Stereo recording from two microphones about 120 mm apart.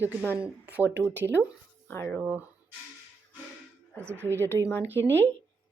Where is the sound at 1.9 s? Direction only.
20° left (ahead or behind).